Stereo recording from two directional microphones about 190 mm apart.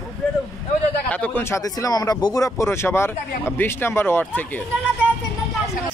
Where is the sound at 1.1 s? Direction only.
10° left (ahead or behind).